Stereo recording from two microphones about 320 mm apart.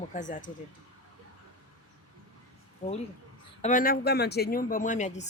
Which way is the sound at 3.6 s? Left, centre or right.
Left.